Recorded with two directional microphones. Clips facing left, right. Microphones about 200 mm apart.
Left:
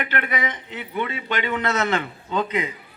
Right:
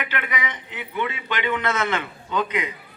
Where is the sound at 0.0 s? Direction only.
45° left (ahead or behind).